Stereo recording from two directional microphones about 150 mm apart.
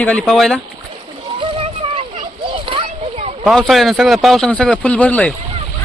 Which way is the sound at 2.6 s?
40° right (ahead or behind).